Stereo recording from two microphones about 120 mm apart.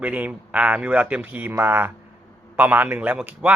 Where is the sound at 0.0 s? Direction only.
10° right (ahead or behind).